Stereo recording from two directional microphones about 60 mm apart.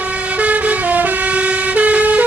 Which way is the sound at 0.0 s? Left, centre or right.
Right.